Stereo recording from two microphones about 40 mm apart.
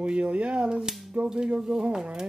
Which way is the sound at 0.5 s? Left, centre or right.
Centre.